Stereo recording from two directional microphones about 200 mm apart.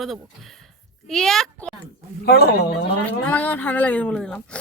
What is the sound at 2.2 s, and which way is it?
Speech, 50° left (ahead or behind).